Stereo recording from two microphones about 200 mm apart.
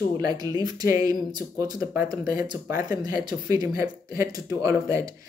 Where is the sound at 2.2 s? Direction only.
45° left (ahead or behind).